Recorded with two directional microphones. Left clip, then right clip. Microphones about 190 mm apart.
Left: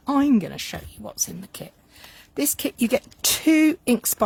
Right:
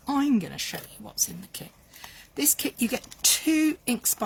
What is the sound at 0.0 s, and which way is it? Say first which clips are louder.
Speech: left 5 dB; 50° left (ahead or behind).